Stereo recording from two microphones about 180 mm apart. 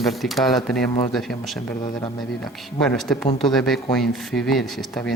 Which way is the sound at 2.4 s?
5° left (ahead or behind).